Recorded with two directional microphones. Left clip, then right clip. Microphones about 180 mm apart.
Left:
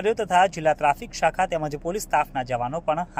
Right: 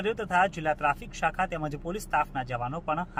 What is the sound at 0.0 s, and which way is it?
Speech, 15° left (ahead or behind).